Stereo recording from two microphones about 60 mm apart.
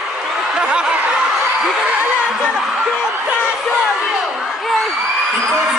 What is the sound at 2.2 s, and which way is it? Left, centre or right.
Music, centre.